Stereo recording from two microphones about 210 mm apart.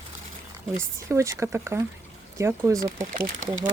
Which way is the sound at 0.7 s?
15° right (ahead or behind).